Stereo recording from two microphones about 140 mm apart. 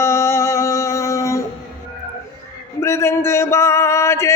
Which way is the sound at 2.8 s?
20° left (ahead or behind).